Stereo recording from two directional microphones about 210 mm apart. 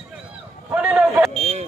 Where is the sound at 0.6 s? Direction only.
5° right (ahead or behind).